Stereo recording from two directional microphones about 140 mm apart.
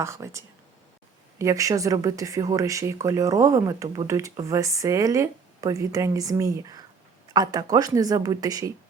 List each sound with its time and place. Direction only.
0.0 s speech: 20° right (ahead or behind)